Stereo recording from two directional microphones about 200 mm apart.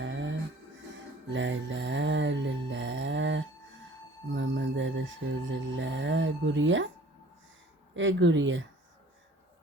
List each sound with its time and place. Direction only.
0.0 s music: 65° right (ahead or behind)
7.9 s speech: 70° right (ahead or behind)